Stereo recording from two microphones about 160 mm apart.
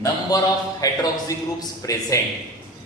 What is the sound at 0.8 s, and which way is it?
A man's voice, 25° left (ahead or behind).